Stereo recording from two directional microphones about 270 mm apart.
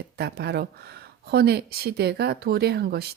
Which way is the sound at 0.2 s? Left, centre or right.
Right.